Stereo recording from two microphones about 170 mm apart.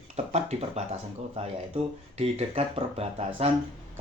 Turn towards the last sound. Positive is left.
turn(degrees=-35)  # may be behind; listen again after turning